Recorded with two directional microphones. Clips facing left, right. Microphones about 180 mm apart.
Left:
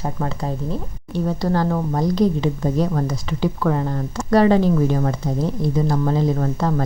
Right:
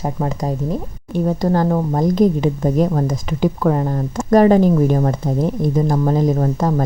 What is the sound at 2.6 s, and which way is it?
A woman's voice, 25° right (ahead or behind).